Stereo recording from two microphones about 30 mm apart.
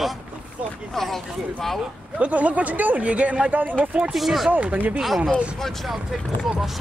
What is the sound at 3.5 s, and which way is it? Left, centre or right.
Speech, right.